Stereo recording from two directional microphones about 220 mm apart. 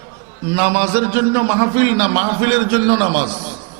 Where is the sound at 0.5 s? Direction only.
10° right (ahead or behind).